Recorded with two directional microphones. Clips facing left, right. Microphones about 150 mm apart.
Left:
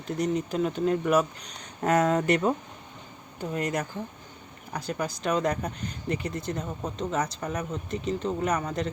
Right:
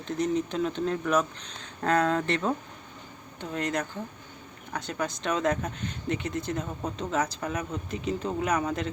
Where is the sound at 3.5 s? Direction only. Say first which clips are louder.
Even; 5° left (ahead or behind).